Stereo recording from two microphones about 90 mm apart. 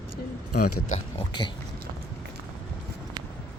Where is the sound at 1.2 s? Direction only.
60° left (ahead or behind).